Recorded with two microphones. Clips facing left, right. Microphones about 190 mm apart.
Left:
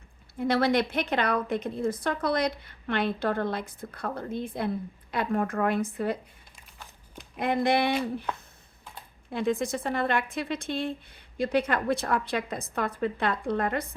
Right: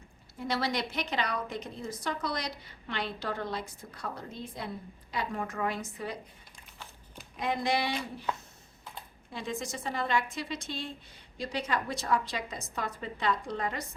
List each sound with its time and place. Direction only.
0.3 s a woman's voice: 55° left (ahead or behind)
7.3 s a woman's voice: 55° left (ahead or behind)
9.3 s a woman's voice: 55° left (ahead or behind)